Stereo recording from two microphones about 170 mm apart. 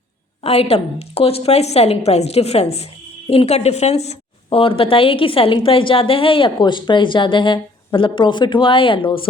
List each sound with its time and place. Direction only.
0.4 s a woman's voice: 35° left (ahead or behind)